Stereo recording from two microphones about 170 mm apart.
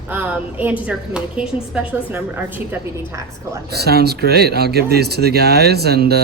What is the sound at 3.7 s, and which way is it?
Speech, 70° right (ahead or behind).